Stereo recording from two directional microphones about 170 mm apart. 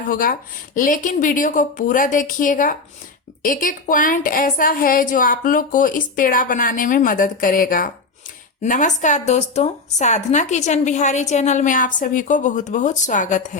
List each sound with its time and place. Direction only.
0.1 s a woman's voice: 55° left (ahead or behind)